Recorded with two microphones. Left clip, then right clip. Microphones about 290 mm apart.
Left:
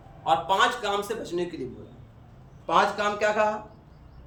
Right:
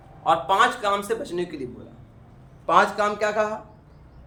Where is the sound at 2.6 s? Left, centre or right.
Centre.